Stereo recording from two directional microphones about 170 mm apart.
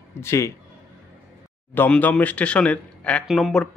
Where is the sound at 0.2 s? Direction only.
15° left (ahead or behind).